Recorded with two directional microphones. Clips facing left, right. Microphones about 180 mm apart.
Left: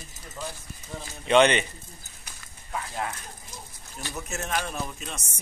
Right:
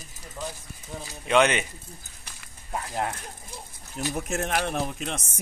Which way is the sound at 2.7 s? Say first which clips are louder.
Right 3 dB; 45° right (ahead or behind).